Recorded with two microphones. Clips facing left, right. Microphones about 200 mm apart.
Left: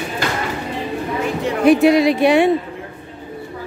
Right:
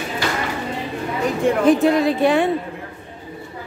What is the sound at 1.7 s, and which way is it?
Speech, 70° left (ahead or behind).